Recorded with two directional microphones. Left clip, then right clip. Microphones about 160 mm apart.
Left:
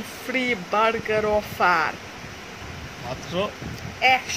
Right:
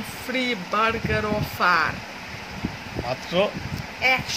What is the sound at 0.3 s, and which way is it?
Speech, 20° left (ahead or behind).